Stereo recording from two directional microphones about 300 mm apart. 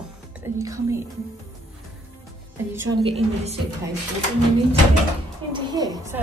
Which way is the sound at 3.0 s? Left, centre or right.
Right.